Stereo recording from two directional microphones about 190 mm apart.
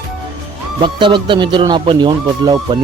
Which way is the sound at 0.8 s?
25° right (ahead or behind).